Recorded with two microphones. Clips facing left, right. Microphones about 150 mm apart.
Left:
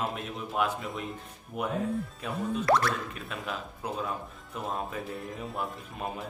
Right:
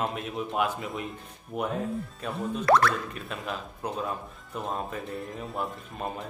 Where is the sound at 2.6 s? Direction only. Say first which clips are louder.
Right 4 dB; 75° right (ahead or behind).